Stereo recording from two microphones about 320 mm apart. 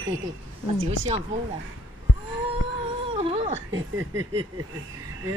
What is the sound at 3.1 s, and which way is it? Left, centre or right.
Wail, centre.